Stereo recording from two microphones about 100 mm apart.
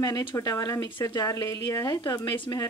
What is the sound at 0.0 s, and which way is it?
A woman's voice, 40° left (ahead or behind).